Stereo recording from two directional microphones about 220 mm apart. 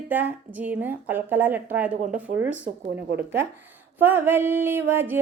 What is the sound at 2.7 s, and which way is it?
Speech, 35° right (ahead or behind).